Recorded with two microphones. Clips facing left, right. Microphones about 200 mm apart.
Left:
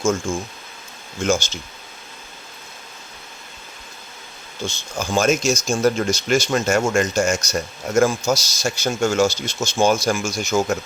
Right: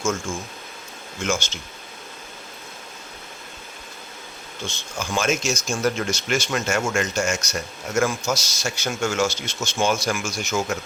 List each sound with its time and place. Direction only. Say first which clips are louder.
1.2 s speech: left 5 dB; 35° left (ahead or behind)
4.9 s speech: left 5 dB; 40° left (ahead or behind)